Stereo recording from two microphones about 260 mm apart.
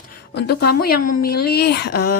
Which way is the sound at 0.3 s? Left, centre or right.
Left.